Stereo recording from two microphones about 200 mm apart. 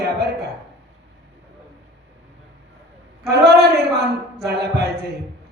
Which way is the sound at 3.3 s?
55° right (ahead or behind).